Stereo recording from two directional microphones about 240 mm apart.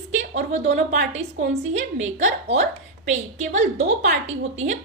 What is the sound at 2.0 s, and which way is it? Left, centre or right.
A woman's voice, right.